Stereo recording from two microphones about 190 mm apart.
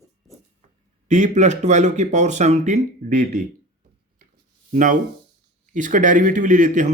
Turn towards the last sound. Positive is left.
turn(degrees=-40)  # may be behind; listen again after turning